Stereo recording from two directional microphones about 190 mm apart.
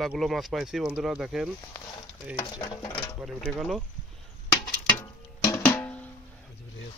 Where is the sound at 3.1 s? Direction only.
Centre (ahead or behind).